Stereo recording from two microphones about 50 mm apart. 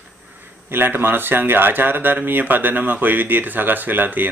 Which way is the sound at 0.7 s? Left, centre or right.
Right.